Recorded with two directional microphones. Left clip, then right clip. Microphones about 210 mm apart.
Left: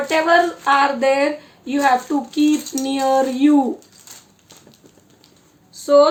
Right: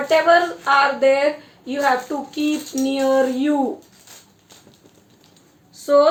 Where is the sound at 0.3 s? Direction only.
55° left (ahead or behind).